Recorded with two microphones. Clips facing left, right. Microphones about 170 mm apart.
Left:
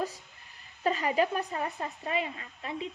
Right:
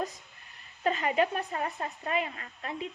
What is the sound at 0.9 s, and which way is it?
Speech, 35° left (ahead or behind).